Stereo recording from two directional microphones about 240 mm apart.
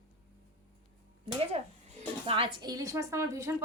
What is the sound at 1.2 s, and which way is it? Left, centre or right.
A woman's voice, right.